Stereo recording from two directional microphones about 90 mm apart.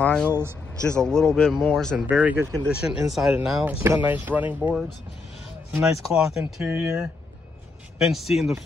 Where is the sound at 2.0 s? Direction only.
15° right (ahead or behind).